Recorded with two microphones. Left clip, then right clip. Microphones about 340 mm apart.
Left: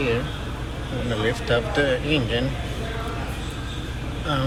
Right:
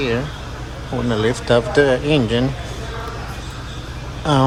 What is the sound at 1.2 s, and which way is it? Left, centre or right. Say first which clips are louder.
Speech: right 6 dB; centre.